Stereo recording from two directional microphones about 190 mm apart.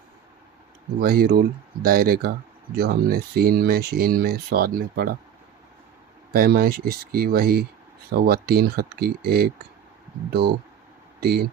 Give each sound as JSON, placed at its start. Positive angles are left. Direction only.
{"t": 0.9, "sound": "speech", "side_deg": -55}
{"t": 6.3, "sound": "speech", "side_deg": -50}
{"t": 11.2, "sound": "speech", "side_deg": -55}